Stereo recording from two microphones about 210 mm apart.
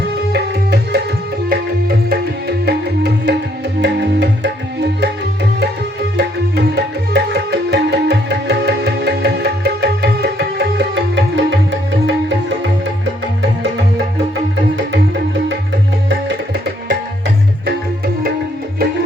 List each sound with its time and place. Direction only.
0.3 s tabla: 50° right (ahead or behind)
2.0 s music: 50° right (ahead or behind)
4.9 s tabla: 55° right (ahead or behind)
6.1 s music: 50° right (ahead or behind)
16.0 s tabla: 50° right (ahead or behind)